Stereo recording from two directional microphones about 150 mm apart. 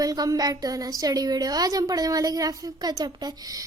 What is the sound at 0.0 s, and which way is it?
A woman's voice, 25° right (ahead or behind).